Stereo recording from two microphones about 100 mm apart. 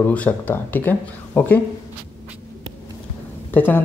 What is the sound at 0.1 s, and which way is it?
Speech, 15° left (ahead or behind).